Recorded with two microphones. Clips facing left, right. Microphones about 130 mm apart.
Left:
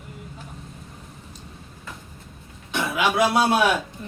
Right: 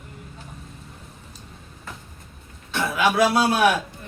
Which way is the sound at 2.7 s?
15° left (ahead or behind).